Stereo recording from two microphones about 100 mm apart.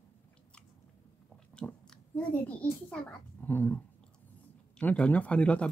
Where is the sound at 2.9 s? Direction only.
15° left (ahead or behind).